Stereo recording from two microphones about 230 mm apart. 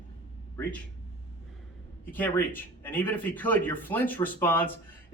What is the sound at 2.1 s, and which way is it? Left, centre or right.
Speech, centre.